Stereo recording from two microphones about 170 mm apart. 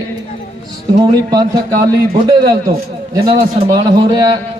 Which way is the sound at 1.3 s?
20° right (ahead or behind).